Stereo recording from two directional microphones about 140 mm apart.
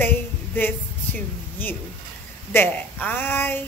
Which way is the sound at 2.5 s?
15° left (ahead or behind).